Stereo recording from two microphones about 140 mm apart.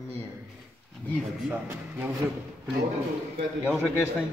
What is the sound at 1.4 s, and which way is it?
Speech, 10° right (ahead or behind).